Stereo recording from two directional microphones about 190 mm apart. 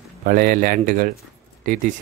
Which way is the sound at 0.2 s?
50° right (ahead or behind).